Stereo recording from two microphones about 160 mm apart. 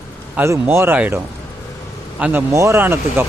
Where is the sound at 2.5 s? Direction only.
20° right (ahead or behind).